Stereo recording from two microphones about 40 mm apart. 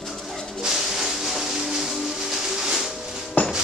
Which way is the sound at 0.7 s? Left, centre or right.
Centre.